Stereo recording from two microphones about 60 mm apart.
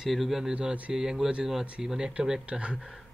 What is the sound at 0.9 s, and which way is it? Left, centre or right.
Speech, centre.